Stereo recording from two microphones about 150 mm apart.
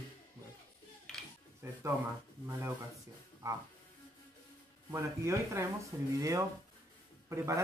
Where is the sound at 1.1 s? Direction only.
5° left (ahead or behind).